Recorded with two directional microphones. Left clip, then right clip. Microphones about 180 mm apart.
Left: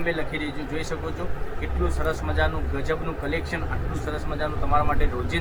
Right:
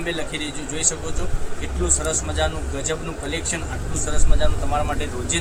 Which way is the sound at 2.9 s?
10° right (ahead or behind).